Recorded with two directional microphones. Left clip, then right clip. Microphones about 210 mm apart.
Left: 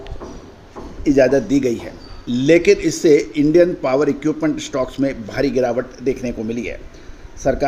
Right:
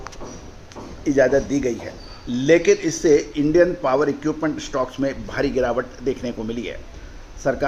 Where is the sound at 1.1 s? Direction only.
30° left (ahead or behind).